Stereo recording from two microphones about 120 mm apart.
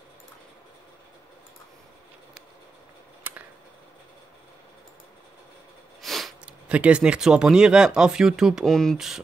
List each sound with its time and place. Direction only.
3.3 s a sound: 15° right (ahead or behind)
5.9 s sniff: centre (ahead or behind)
6.4 s speech: 10° right (ahead or behind)